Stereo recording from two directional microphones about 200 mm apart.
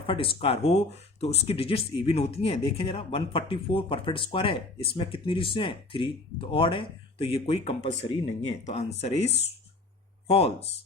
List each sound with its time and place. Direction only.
0.1 s speech: 30° left (ahead or behind)